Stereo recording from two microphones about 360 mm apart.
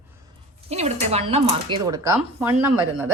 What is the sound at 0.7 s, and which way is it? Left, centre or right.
Speech, centre.